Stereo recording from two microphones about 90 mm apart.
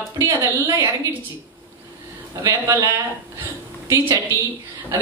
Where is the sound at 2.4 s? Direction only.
40° right (ahead or behind).